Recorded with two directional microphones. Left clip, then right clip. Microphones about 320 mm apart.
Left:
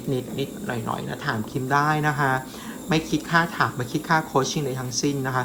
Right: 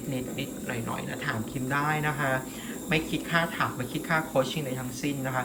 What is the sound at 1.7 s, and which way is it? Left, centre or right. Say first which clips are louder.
A woman's voice: left 7 dB; centre.